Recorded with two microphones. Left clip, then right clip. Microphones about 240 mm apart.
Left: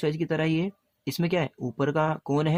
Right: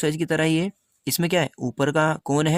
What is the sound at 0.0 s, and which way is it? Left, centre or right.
Speech, right.